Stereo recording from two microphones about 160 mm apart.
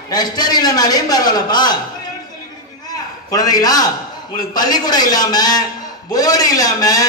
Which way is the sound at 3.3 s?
25° left (ahead or behind).